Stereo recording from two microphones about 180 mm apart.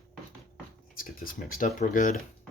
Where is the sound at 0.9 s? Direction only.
50° left (ahead or behind).